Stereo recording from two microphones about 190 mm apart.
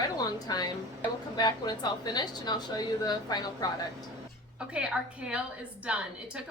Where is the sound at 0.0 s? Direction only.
20° left (ahead or behind).